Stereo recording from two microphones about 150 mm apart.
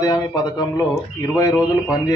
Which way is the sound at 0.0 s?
25° left (ahead or behind).